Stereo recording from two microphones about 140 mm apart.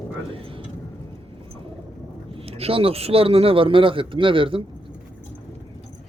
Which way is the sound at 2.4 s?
45° right (ahead or behind).